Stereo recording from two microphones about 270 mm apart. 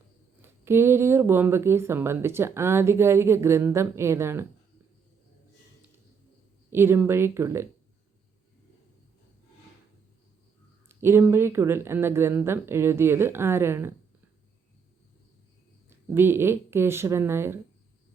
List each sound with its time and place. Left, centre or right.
0.4 s speech: centre
6.7 s speech: centre
10.8 s speech: centre
15.9 s speech: centre